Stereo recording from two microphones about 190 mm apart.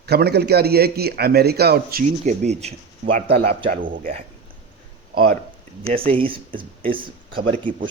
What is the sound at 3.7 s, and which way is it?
Speech, 45° right (ahead or behind).